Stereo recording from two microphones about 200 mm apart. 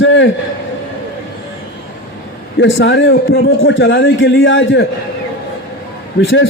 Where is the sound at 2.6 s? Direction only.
65° left (ahead or behind).